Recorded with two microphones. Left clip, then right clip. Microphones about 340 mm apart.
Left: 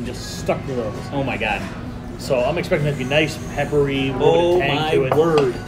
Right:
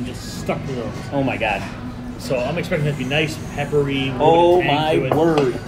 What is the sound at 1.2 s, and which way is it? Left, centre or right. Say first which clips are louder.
Speech: right 1 dB; centre.